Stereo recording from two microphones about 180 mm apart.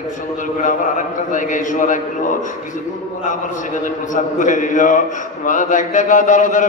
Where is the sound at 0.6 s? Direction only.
45° left (ahead or behind).